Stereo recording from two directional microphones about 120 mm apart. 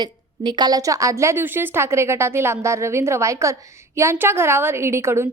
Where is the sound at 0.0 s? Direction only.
40° right (ahead or behind).